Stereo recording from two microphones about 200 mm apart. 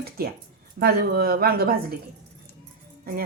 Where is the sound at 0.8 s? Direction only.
50° right (ahead or behind).